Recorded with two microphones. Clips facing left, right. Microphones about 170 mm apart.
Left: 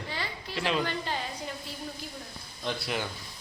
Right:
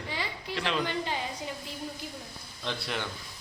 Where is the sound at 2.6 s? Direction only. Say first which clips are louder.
Left 2 dB; 5° left (ahead or behind).